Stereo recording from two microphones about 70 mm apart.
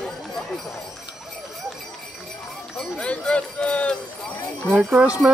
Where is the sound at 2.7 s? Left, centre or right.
Centre.